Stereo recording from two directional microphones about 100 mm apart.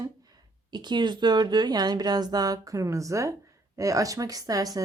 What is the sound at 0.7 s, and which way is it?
Speech, 50° right (ahead or behind).